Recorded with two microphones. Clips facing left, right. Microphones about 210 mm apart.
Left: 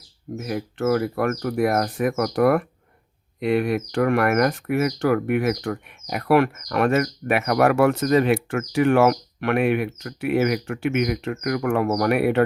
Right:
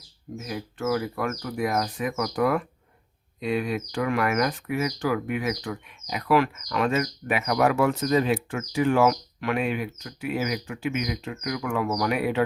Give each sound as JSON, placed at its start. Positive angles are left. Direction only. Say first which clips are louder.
{"t": 0.3, "sound": "speech", "louder": "left 6 dB", "side_deg": 60}